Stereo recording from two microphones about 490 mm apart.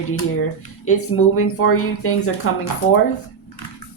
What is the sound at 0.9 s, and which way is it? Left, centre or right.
A woman's voice, left.